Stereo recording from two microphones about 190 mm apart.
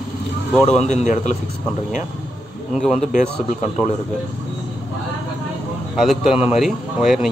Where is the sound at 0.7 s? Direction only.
35° left (ahead or behind).